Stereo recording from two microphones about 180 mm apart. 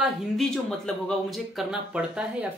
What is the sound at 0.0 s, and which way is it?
Speech, centre (ahead or behind).